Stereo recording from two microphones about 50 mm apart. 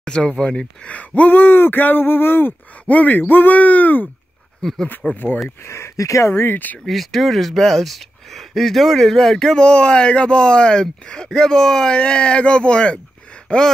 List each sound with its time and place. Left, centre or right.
0.0 s speech: centre; by 2.5 s left
2.9 s speech: left
4.6 s speech: centre
5.1 s speech: left
5.6 s speech: left
6.3 s speech: left
6.9 s speech: centre